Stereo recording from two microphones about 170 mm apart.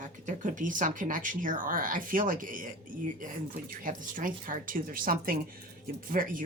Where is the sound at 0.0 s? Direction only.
50° right (ahead or behind).